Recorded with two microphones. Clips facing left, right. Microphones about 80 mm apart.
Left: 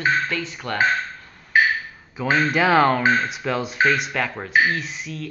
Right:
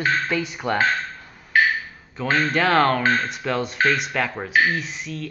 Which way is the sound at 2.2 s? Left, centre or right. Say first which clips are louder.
Left 1 dB; centre.